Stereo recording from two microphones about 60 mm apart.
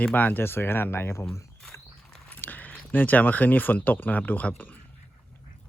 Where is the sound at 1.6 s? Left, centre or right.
Centre.